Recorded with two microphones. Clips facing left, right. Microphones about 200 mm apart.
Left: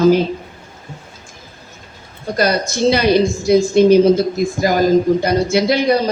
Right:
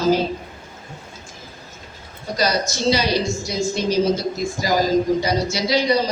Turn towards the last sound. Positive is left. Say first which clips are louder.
# left 5 dB
turn(degrees=55)  # may be behind; listen again after turning